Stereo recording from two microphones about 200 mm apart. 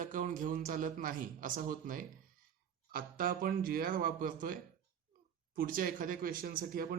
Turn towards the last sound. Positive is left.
turn(degrees=-45)  # may be behind; listen again after turning